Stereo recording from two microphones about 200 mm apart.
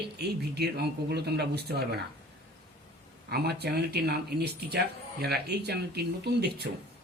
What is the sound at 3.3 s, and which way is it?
Speech, 55° right (ahead or behind).